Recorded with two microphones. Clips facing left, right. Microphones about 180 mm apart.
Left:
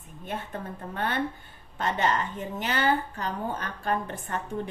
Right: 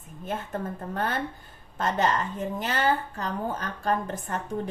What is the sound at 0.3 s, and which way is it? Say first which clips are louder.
Speech: right 3 dB; 45° right (ahead or behind).